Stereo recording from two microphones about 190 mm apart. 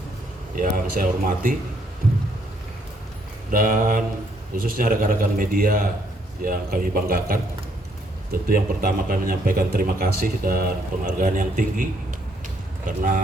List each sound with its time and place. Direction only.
0.5 s a man's voice: 45° right (ahead or behind)
3.5 s a man's voice: 45° right (ahead or behind)